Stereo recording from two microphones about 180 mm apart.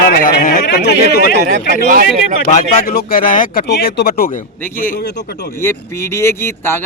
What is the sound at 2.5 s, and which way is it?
A man's voice, 45° left (ahead or behind).